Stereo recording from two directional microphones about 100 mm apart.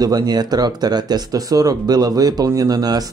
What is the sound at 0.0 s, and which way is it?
Speech, 40° right (ahead or behind).